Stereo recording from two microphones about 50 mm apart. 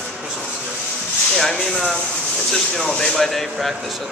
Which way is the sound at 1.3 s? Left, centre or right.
Centre.